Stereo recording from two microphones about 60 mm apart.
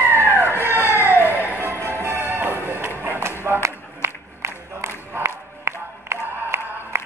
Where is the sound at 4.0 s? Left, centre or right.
Right.